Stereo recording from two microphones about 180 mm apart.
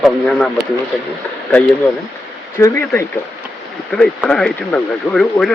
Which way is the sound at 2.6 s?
15° left (ahead or behind).